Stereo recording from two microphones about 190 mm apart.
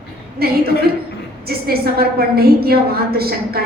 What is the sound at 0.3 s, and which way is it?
A woman's voice, 55° right (ahead or behind).